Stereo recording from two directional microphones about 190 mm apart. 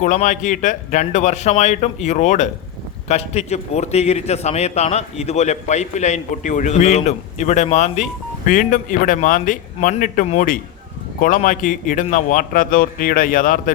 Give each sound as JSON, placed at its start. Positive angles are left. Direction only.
{"t": 0.0, "sound": "a man's voice", "side_deg": 40}